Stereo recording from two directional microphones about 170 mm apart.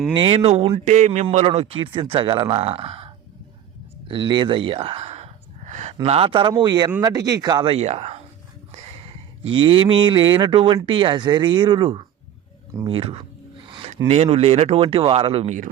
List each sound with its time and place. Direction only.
0.1 s speech: 30° right (ahead or behind)
4.1 s speech: 30° right (ahead or behind)
13.7 s a sound: 30° right (ahead or behind)
14.1 s speech: 40° right (ahead or behind)